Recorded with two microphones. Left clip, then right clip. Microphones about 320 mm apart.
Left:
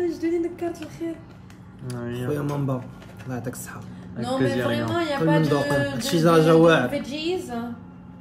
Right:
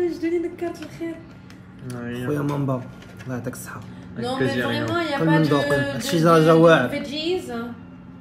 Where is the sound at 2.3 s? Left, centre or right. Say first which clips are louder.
Right 3 dB; centre.